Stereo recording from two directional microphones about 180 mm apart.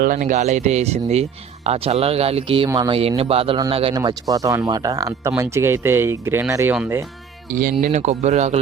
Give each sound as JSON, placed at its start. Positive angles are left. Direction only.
{"t": 0.0, "sound": "speech", "side_deg": -45}
{"t": 2.6, "sound": "speech", "side_deg": -20}
{"t": 3.0, "sound": "speech", "side_deg": -30}
{"t": 7.5, "sound": "speech", "side_deg": -50}